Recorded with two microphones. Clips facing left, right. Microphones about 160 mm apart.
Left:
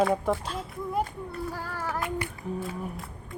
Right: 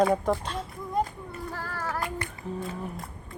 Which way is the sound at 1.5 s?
10° left (ahead or behind).